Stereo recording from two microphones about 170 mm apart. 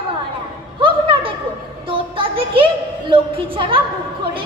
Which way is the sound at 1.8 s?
30° right (ahead or behind).